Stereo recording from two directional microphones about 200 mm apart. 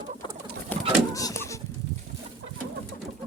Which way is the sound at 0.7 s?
15° left (ahead or behind).